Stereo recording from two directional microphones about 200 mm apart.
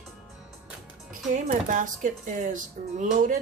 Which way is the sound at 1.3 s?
40° right (ahead or behind).